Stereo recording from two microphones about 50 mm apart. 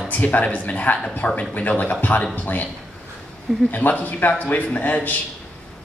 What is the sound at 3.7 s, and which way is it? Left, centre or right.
Speech, left.